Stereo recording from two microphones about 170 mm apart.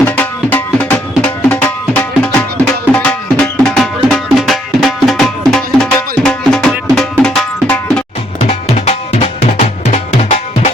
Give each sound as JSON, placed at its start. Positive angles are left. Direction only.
{"t": 0.0, "sound": "music", "side_deg": 10}
{"t": 8.4, "sound": "music", "side_deg": 40}